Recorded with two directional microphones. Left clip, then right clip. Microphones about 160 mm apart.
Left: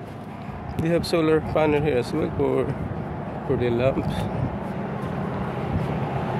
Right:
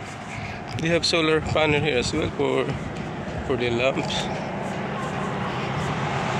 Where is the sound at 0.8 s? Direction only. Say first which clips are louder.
Right 1 dB; 10° left (ahead or behind).